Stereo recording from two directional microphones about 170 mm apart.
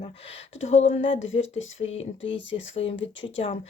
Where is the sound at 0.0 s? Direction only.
40° left (ahead or behind).